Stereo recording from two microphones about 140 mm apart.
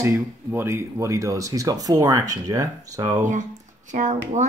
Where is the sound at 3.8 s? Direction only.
60° right (ahead or behind).